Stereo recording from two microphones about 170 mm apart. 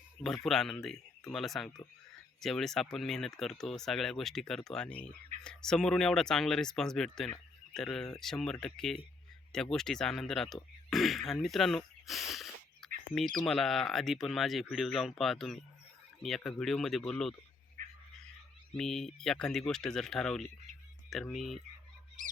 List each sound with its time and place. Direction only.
0.4 s speech: centre (ahead or behind)
17.8 s a sound: 55° right (ahead or behind)
18.8 s speech: centre (ahead or behind)
22.2 s honk: 50° right (ahead or behind)